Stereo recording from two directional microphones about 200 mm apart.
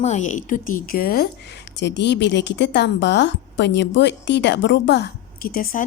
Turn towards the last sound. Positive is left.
turn(degrees=45)  # may be behind; listen again after turning